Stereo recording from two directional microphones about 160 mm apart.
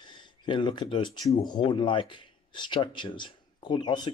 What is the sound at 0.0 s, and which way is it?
Speech, 30° left (ahead or behind).